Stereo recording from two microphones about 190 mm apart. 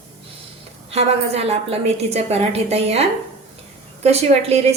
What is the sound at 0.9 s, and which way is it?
A woman's voice, 35° right (ahead or behind).